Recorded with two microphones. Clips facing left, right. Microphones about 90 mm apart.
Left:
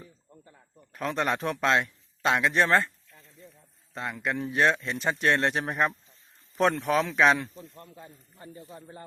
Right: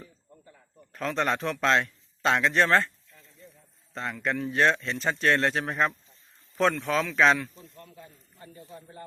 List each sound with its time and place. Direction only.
0.9 s speech: 10° left (ahead or behind)
3.9 s a man's voice: 10° left (ahead or behind); by 7.2 s 25° left (ahead or behind)
7.2 s speech: 15° left (ahead or behind)
7.4 s a man's voice: 30° left (ahead or behind)